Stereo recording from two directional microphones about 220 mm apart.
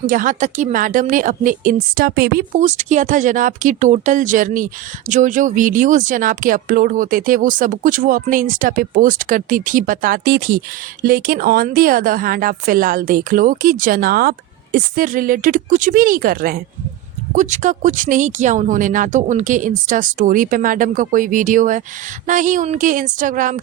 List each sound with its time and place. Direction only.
0.1 s a woman's voice: 35° right (ahead or behind)